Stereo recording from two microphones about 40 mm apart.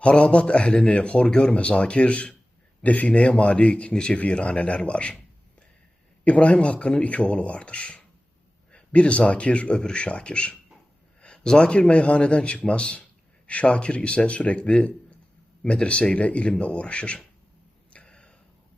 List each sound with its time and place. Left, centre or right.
0.0 s speech: left
3.1 s speech: left
6.2 s speech: left
17.9 s a sound: left